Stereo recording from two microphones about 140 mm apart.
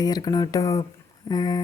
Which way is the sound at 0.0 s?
30° left (ahead or behind).